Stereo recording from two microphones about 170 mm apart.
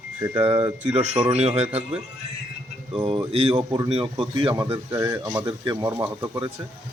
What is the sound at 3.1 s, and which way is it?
A man's voice, 35° right (ahead or behind).